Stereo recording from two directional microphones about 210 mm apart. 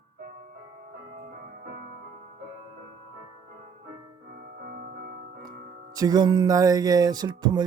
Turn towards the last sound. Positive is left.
turn(degrees=-20)  # may be behind; listen again after turning